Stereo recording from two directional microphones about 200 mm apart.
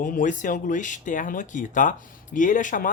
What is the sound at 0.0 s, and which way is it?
Speech, 40° left (ahead or behind).